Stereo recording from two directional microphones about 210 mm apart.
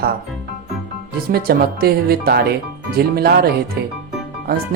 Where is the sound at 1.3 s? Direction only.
45° right (ahead or behind).